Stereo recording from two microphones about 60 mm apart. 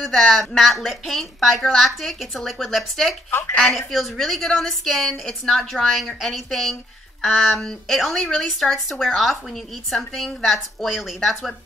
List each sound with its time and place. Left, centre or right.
0.0 s a woman's voice: centre
3.3 s speech: left
3.5 s a woman's voice: centre